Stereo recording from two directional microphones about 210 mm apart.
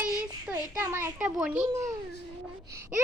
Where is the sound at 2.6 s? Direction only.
15° right (ahead or behind).